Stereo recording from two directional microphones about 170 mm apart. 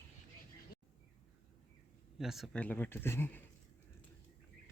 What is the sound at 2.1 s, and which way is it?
Speech, centre (ahead or behind).